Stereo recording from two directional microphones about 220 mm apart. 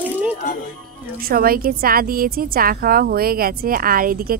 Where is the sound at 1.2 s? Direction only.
40° right (ahead or behind).